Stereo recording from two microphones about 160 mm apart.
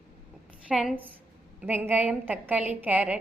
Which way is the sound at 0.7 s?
5° right (ahead or behind).